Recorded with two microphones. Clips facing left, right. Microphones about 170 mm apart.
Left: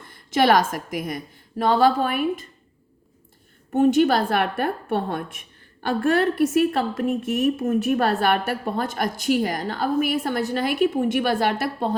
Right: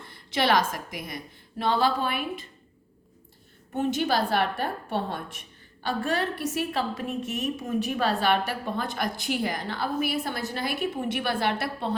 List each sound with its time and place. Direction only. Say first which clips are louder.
0.1 s a woman's voice: left 6 dB; 45° left (ahead or behind)
3.7 s a woman's voice: left 8 dB; 50° left (ahead or behind)